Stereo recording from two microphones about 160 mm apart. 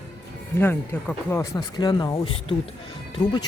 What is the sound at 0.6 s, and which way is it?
Speech, 15° left (ahead or behind).